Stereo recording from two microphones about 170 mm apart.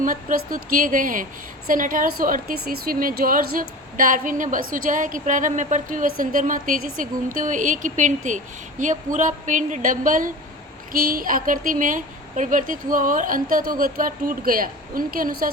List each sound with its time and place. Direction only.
0.0 s a woman's voice: 50° right (ahead or behind)